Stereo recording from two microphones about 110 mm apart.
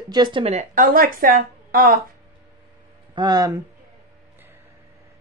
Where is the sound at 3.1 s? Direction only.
40° right (ahead or behind).